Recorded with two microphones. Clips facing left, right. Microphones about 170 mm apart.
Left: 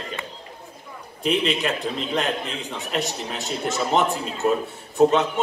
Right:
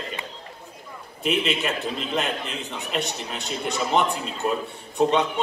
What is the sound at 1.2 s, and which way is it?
Speech, centre (ahead or behind).